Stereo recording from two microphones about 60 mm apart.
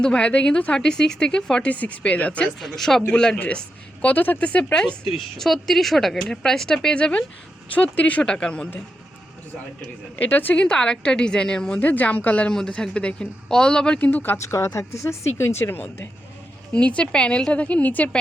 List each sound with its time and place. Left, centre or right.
0.0 s speech: centre
2.6 s speech: centre
4.0 s a woman's voice: left
5.4 s speech: centre
10.2 s speech: left
10.6 s speech: centre
11.8 s a woman's voice: left
12.5 s speech: centre
14.1 s speech: left
14.5 s speech: left
16.7 s a woman's voice: centre